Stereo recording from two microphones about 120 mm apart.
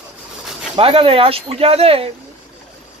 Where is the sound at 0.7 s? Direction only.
50° right (ahead or behind).